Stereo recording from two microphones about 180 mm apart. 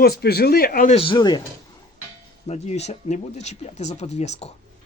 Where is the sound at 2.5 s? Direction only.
40° left (ahead or behind).